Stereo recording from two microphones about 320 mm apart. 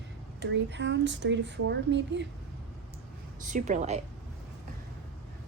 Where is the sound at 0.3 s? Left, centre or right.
Right.